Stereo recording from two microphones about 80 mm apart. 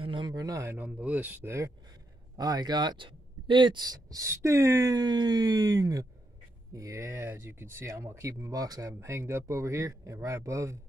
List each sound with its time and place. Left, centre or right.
0.0 s a sound: right
0.3 s speech: right
0.7 s speech: centre
2.3 s speech: right
3.8 s speech: right
9.0 s speech: right